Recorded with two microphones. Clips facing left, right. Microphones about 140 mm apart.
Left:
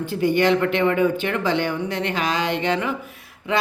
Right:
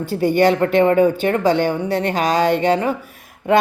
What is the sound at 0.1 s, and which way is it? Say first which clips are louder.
Speech: right 3 dB; 40° right (ahead or behind).